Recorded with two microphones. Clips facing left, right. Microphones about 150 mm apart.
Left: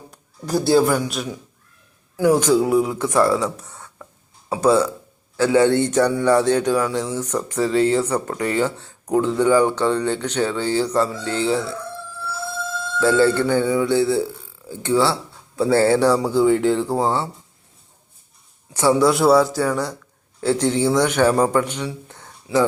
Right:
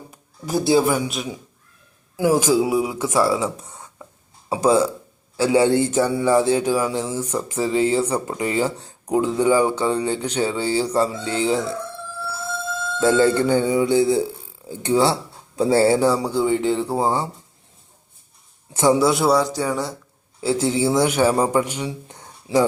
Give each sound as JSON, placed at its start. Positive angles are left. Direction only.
{"t": 0.1, "sound": "a man's voice", "side_deg": 0}
{"t": 3.7, "sound": "a sound", "side_deg": -10}
{"t": 4.4, "sound": "speech", "side_deg": -15}
{"t": 13.0, "sound": "speech", "side_deg": -20}
{"t": 18.7, "sound": "a man's voice", "side_deg": -20}
{"t": 18.9, "sound": "a man's voice", "side_deg": 0}